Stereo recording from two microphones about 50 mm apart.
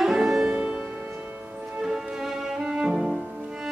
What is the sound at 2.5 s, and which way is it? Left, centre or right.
Cello, centre.